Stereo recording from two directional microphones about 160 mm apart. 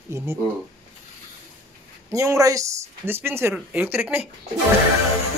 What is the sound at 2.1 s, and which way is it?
Speech, 20° right (ahead or behind).